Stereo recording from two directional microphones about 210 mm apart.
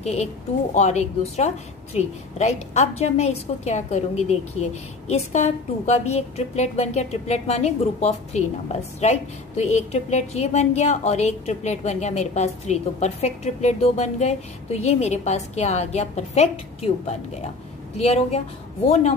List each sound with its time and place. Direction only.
0.0 s a woman's voice: 30° left (ahead or behind)